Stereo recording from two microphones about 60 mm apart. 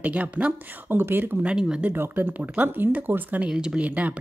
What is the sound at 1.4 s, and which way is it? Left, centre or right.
Speech, centre.